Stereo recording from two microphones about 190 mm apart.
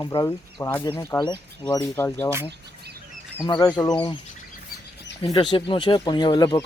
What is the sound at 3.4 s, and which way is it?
Speech, 20° left (ahead or behind).